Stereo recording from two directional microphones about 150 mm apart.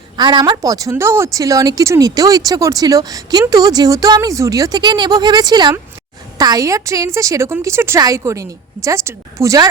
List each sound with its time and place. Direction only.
0.2 s a woman's voice: 30° right (ahead or behind)